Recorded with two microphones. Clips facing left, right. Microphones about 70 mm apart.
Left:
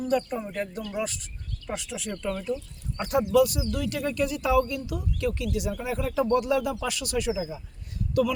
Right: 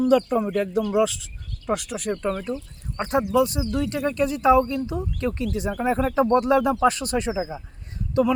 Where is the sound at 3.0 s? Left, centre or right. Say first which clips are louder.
Right 1 dB; right.